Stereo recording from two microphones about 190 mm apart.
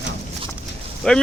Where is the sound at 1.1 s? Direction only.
5° left (ahead or behind).